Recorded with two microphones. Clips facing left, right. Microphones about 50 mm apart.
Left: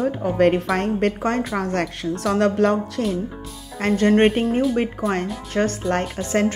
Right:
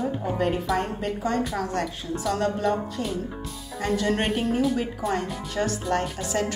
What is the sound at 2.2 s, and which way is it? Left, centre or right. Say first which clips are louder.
Speech: left 7 dB; left.